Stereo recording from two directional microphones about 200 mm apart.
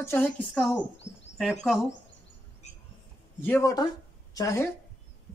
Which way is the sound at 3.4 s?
15° left (ahead or behind).